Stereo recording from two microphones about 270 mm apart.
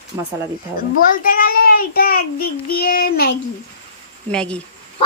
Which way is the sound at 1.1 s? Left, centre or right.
Left.